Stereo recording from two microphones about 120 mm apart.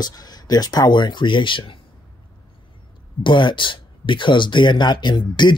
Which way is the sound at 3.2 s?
40° left (ahead or behind).